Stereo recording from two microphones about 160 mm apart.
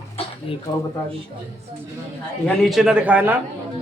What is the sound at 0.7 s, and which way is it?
Speech, 25° left (ahead or behind).